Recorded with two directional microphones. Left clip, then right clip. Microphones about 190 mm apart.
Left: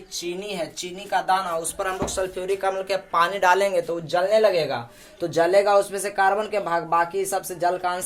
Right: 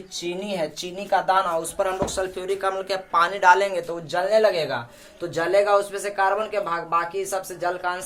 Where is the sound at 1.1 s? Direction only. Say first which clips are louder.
Right 2 dB; 25° right (ahead or behind).